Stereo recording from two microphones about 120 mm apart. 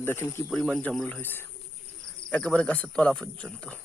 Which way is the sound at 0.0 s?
20° left (ahead or behind).